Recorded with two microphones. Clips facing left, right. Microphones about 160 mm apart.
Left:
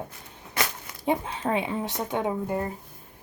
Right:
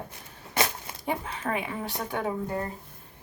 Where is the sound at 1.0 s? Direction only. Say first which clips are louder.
Left 5 dB; 25° left (ahead or behind).